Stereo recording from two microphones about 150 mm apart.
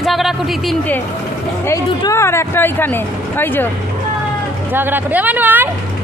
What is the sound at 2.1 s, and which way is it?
Speech, 20° left (ahead or behind).